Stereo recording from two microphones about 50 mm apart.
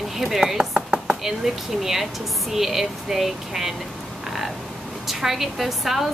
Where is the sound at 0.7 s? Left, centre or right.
Centre.